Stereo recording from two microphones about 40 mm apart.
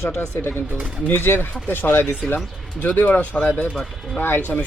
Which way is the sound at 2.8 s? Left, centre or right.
Left.